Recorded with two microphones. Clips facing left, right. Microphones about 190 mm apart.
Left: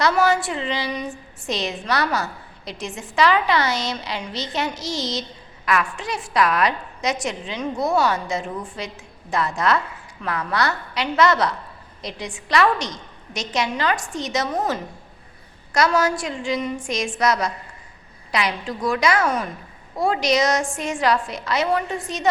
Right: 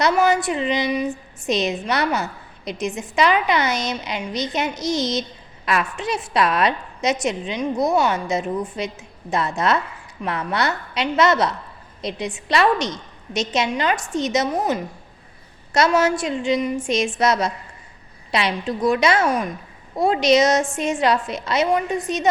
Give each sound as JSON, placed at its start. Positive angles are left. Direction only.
{"t": 0.0, "sound": "a woman's voice", "side_deg": -15}